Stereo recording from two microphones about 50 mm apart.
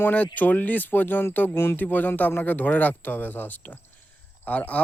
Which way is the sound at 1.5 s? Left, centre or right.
Left.